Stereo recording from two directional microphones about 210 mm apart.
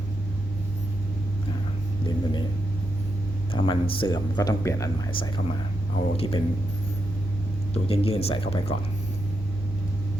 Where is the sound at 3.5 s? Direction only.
25° left (ahead or behind).